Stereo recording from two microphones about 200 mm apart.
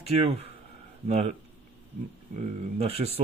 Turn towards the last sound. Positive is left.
turn(degrees=-30)  # may be behind; listen again after turning